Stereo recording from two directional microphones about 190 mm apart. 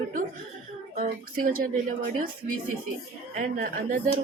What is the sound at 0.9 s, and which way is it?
Speech, 45° right (ahead or behind).